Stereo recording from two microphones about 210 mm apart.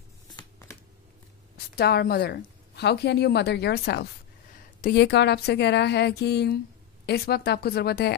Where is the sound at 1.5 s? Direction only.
50° left (ahead or behind).